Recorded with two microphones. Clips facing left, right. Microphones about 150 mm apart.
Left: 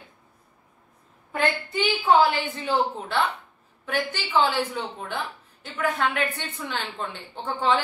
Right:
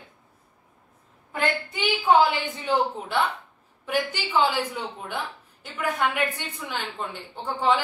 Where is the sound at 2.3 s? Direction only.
15° right (ahead or behind).